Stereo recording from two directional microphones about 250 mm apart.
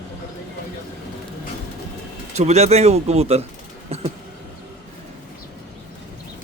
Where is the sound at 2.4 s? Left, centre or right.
Right.